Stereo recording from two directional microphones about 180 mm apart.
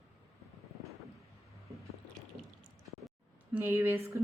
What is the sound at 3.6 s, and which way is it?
Speech, 10° right (ahead or behind).